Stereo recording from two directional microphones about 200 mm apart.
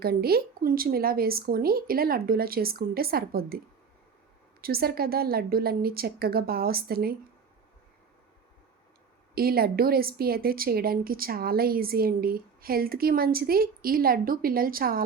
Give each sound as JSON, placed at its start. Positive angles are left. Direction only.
{"t": 0.0, "sound": "a woman's voice", "side_deg": -50}
{"t": 4.6, "sound": "a woman's voice", "side_deg": -50}
{"t": 9.3, "sound": "a woman's voice", "side_deg": -50}